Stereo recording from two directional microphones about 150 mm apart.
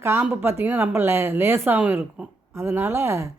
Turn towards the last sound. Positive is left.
turn(degrees=-15)  # may be behind; listen again after turning